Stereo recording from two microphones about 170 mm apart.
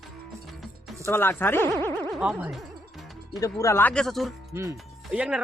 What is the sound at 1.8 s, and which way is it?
Boing, 15° left (ahead or behind).